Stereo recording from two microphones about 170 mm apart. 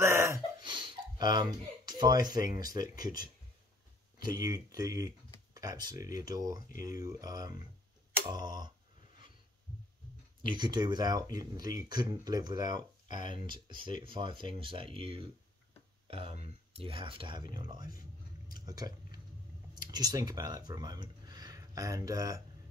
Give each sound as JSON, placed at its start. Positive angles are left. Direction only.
{"t": 0.0, "sound": "a sound", "side_deg": -15}
{"t": 0.7, "sound": "speech", "side_deg": -30}
{"t": 4.4, "sound": "speech", "side_deg": -20}
{"t": 10.5, "sound": "speech", "side_deg": -25}